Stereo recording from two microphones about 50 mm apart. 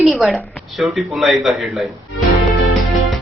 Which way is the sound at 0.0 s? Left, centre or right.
Centre.